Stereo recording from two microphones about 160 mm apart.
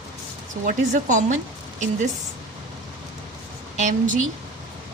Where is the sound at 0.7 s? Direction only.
50° right (ahead or behind).